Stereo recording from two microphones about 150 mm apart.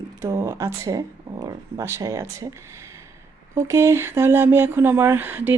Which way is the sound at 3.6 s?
20° right (ahead or behind).